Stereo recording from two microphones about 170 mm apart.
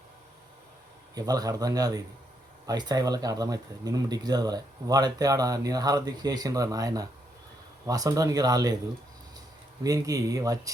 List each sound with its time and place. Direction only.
1.1 s speech: 20° right (ahead or behind)
9.8 s speech: 20° right (ahead or behind)